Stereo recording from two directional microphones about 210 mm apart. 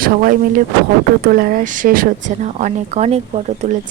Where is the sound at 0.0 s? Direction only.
40° right (ahead or behind).